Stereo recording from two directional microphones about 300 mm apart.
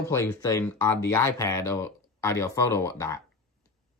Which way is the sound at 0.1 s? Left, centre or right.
Centre.